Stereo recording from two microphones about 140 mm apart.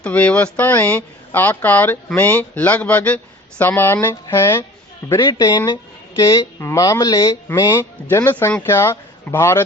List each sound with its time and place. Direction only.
0.0 s speech: 10° left (ahead or behind)
5.2 s speech: 30° left (ahead or behind); by 9.6 s 15° left (ahead or behind)